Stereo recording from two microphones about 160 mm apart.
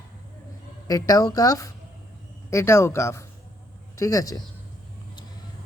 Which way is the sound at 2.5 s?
15° left (ahead or behind).